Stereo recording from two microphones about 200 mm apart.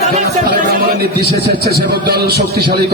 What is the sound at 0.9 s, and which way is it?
A man's voice, 55° right (ahead or behind).